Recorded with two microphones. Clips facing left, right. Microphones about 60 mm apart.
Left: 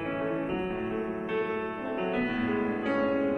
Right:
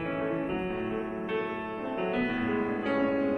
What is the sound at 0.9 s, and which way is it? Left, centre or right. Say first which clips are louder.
Music: left 1 dB; left.